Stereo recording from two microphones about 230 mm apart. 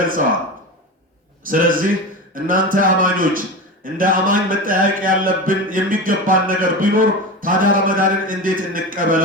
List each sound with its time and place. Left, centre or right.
1.5 s speech: right